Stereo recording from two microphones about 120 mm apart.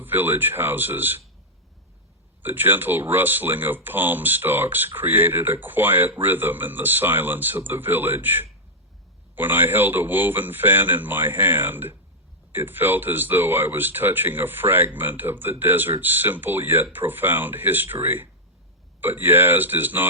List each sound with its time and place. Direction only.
0.0 s speech: 15° right (ahead or behind)
2.4 s speech: 15° right (ahead or behind)